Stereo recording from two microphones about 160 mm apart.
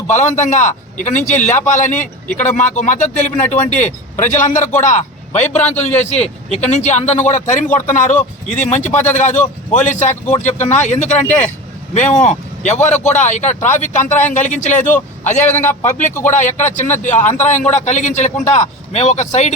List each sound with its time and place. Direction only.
0.1 s a man's voice: 50° left (ahead or behind)
8.9 s a man's voice: 10° left (ahead or behind)
9.1 s a man's voice: 50° left (ahead or behind)
14.1 s a man's voice: 10° left (ahead or behind)
14.3 s a man's voice: 50° left (ahead or behind)
15.4 s a man's voice: 10° left (ahead or behind)
15.8 s a man's voice: 50° left (ahead or behind)